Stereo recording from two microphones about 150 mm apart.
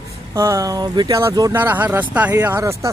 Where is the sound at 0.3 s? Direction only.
20° right (ahead or behind).